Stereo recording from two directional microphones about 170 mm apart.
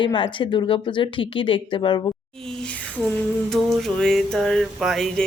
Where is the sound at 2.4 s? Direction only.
5° left (ahead or behind).